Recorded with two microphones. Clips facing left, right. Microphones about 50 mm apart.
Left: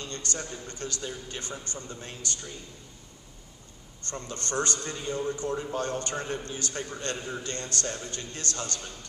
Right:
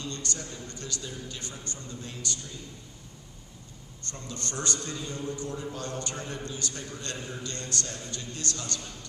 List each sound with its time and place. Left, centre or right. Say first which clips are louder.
0.0 s a man's voice: left 1 dB; left
4.1 s a man's voice: left 5 dB; left